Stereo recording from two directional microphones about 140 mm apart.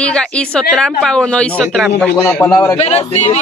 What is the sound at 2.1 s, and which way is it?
Speech, 15° left (ahead or behind).